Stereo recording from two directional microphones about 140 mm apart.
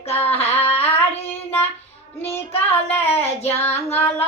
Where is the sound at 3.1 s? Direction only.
45° left (ahead or behind).